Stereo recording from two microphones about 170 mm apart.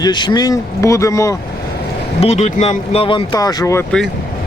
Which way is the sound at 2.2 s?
40° left (ahead or behind).